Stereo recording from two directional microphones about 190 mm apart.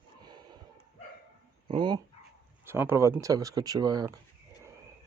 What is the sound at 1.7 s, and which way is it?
Speech, 25° right (ahead or behind).